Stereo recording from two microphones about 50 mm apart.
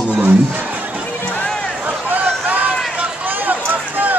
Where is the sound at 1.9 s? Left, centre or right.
Right.